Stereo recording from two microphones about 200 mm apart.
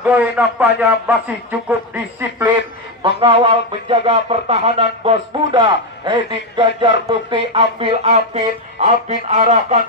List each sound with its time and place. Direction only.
0.1 s a man's voice: 10° right (ahead or behind)
3.0 s speech: 25° right (ahead or behind)